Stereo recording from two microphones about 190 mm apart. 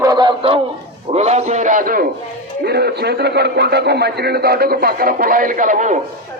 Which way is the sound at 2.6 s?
55° right (ahead or behind).